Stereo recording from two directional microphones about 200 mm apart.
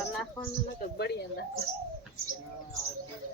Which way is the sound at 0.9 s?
55° left (ahead or behind).